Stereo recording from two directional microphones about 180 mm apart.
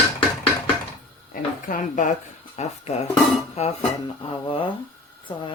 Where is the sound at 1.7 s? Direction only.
45° left (ahead or behind); by 4.7 s 30° left (ahead or behind).